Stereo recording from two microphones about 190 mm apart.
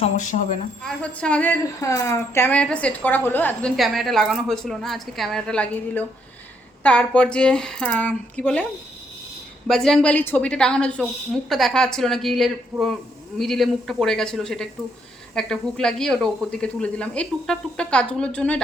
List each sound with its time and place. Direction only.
0.0 s speech: 40° left (ahead or behind)
0.9 s a woman's voice: 5° left (ahead or behind)
3.8 s speech: centre (ahead or behind)
9.6 s speech: centre (ahead or behind)